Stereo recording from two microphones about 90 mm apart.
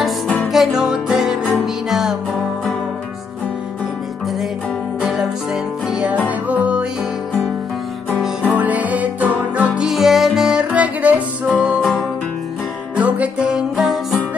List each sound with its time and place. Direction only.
0.5 s music: 5° right (ahead or behind)
5.0 s music: 5° right (ahead or behind)
6.2 s music: 15° right (ahead or behind)
8.5 s music: 15° right (ahead or behind)
9.8 s music: 5° right (ahead or behind)
12.9 s music: 15° right (ahead or behind)